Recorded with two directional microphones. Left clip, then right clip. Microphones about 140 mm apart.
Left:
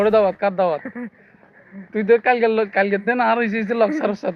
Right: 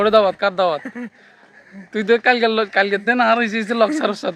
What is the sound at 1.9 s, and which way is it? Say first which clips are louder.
A man's voice: even; 35° right (ahead or behind).